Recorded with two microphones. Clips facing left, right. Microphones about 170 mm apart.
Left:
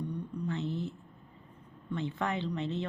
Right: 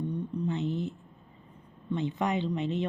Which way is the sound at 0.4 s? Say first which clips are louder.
Right 3 dB; 20° right (ahead or behind).